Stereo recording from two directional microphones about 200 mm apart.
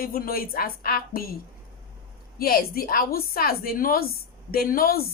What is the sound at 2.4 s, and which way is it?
A woman's voice, 50° left (ahead or behind).